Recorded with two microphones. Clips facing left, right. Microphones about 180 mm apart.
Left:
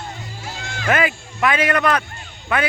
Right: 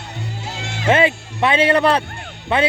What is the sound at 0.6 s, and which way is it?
A man's voice, 25° right (ahead or behind).